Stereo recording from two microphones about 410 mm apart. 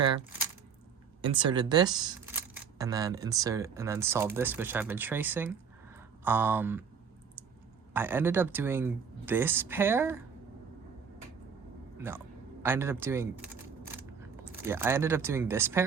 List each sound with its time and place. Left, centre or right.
1.2 s speech: centre
7.9 s speech: centre
11.9 s speech: centre
14.7 s speech: centre